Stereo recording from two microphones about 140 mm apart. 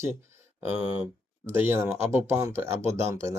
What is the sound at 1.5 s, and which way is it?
Speech, 15° right (ahead or behind).